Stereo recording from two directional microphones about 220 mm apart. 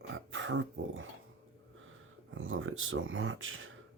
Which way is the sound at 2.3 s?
65° right (ahead or behind).